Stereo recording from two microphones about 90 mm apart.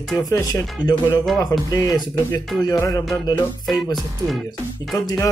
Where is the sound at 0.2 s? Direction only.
45° left (ahead or behind).